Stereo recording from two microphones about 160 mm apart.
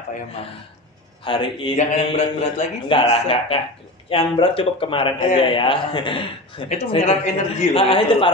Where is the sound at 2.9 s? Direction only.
35° left (ahead or behind).